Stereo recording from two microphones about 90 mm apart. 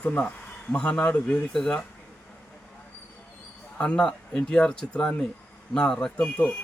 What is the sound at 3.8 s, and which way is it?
Speech, 10° left (ahead or behind).